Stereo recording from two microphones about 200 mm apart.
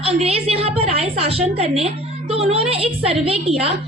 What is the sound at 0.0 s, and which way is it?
A woman's voice, 30° right (ahead or behind).